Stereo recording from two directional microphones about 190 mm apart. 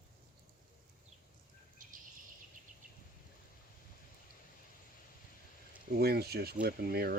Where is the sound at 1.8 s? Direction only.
45° right (ahead or behind).